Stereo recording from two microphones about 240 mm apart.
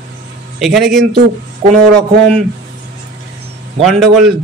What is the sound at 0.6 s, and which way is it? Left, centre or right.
Speech, centre.